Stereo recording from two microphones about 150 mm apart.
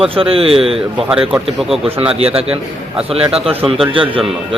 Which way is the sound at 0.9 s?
5° right (ahead or behind).